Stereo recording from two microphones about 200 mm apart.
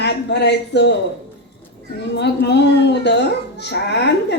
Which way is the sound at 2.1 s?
60° left (ahead or behind).